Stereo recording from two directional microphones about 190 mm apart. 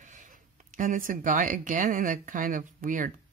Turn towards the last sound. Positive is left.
turn(degrees=-45)  # may be behind; listen again after turning